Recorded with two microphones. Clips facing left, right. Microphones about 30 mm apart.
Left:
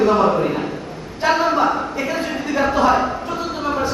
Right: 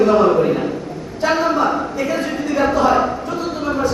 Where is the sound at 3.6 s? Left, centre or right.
Centre.